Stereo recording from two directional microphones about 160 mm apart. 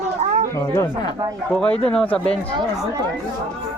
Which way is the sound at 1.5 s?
5° left (ahead or behind).